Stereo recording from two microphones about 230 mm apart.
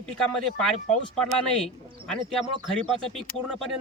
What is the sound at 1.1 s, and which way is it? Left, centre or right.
Speech, centre.